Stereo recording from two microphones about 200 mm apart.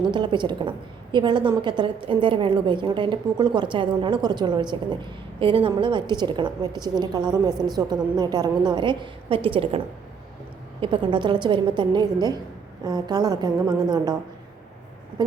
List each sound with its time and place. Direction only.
0.1 s a woman's voice: 25° right (ahead or behind)